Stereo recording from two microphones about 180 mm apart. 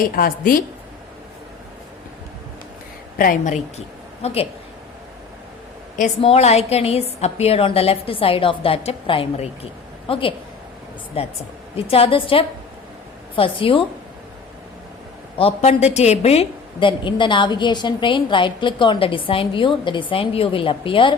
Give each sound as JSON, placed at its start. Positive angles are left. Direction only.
{"t": 0.0, "sound": "a woman's voice", "side_deg": 55}
{"t": 3.2, "sound": "a woman's voice", "side_deg": 50}
{"t": 6.1, "sound": "a woman's voice", "side_deg": 35}
{"t": 15.4, "sound": "a woman's voice", "side_deg": 35}